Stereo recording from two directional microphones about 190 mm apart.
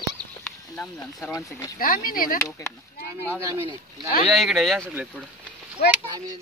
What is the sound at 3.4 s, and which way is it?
Speech, 15° right (ahead or behind).